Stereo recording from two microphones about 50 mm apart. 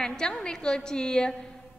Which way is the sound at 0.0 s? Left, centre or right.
Centre.